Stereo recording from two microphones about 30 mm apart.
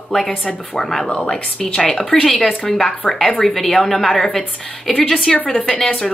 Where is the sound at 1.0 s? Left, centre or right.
Left.